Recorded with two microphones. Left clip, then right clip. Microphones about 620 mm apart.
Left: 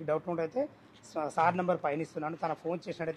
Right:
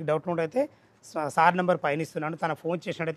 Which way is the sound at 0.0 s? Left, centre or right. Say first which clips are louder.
Right 5 dB; right.